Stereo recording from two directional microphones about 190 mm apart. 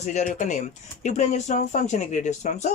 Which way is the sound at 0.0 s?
40° left (ahead or behind).